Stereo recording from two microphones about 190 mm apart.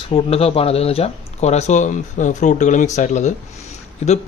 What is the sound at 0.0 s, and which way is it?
A man's voice, 30° left (ahead or behind).